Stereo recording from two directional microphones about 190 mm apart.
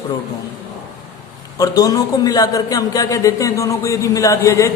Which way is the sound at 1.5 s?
20° left (ahead or behind).